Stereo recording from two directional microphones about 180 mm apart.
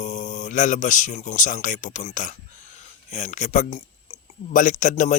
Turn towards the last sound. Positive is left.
turn(degrees=45)  # may be behind; listen again after turning